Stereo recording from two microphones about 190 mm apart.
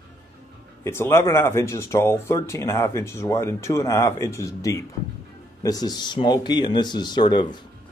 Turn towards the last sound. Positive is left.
turn(degrees=25)  # may be behind; listen again after turning